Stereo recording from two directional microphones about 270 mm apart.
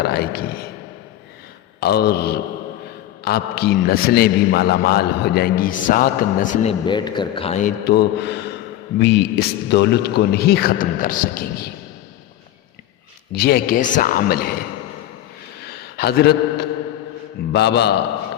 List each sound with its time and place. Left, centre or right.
0.0 s a man's voice: left
1.8 s a man's voice: left
13.3 s a man's voice: left
16.0 s a man's voice: left